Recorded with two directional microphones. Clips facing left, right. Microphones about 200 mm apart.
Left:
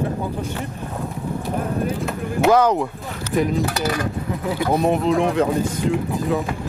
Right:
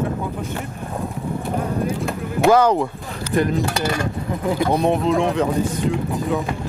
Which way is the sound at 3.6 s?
25° right (ahead or behind).